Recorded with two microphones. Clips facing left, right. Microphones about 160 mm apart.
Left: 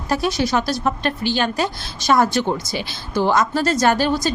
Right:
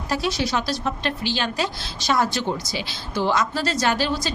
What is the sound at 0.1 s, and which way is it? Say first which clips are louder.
A woman's voice: left 4 dB; 50° left (ahead or behind).